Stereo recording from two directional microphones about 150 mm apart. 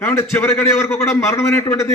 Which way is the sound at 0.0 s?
15° left (ahead or behind).